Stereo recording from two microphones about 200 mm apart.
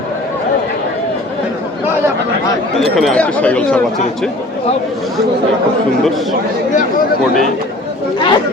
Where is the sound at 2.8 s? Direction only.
Centre (ahead or behind).